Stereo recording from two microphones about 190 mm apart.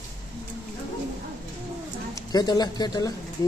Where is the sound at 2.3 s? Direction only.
20° left (ahead or behind).